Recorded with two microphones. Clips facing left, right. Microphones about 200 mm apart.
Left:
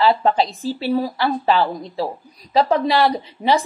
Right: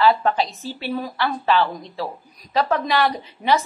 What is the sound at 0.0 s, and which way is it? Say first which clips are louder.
A woman's voice: left 2 dB; 30° left (ahead or behind).